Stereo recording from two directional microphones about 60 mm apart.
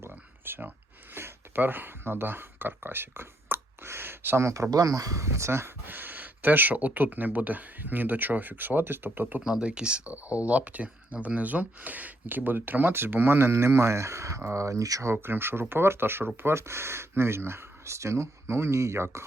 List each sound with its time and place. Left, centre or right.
0.0 s a sound: right
4.4 s speech: right
4.7 s speech: right
9.4 s speech: centre; by 15.0 s right
15.0 s speech: right